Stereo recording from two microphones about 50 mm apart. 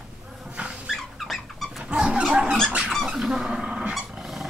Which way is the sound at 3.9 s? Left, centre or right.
Centre.